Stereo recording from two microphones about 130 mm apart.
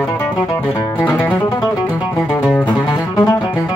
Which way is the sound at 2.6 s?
30° left (ahead or behind).